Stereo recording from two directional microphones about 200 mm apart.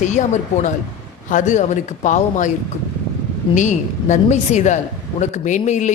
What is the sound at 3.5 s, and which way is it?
A man's voice, 25° left (ahead or behind).